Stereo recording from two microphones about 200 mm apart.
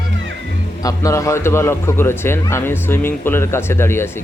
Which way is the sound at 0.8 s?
15° left (ahead or behind).